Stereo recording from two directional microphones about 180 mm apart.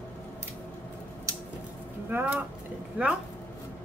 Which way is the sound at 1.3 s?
20° right (ahead or behind).